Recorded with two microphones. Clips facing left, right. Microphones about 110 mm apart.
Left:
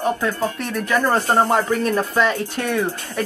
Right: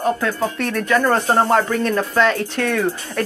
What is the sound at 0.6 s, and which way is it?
Speech, centre (ahead or behind).